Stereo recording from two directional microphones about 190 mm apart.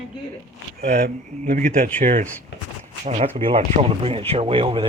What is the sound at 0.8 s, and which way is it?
Speech, 45° right (ahead or behind).